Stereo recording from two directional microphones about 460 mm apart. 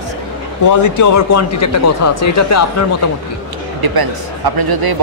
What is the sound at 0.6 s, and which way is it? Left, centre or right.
A man's voice, left.